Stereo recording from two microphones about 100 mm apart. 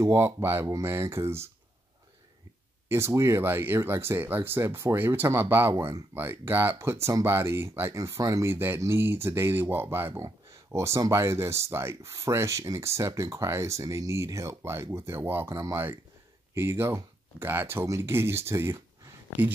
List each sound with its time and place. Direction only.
0.0 s speech: 25° right (ahead or behind)
2.9 s speech: 30° right (ahead or behind)